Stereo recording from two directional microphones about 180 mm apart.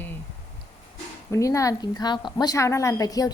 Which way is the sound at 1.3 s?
15° left (ahead or behind).